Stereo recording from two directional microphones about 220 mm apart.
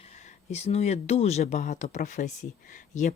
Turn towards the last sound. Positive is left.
turn(degrees=35)  # may be behind; listen again after turning